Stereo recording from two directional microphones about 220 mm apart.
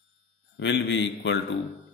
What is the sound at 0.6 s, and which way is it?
Speech, 55° left (ahead or behind).